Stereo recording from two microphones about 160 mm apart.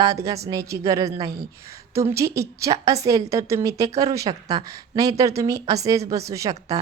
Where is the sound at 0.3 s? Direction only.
20° right (ahead or behind).